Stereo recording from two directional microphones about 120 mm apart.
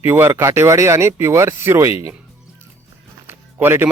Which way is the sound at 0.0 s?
20° right (ahead or behind).